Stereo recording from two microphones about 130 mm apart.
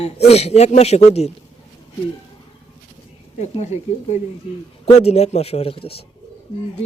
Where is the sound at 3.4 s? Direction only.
60° left (ahead or behind); by 6.0 s 45° left (ahead or behind).